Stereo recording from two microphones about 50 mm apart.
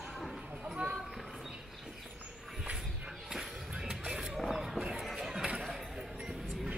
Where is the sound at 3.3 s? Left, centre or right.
Centre.